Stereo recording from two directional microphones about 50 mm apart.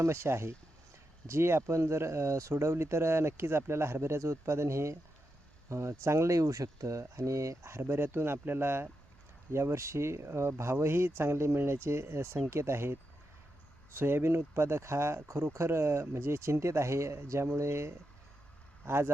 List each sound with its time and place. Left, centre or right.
0.0 s speech: right
5.6 s speech: right
9.5 s speech: right
18.9 s speech: right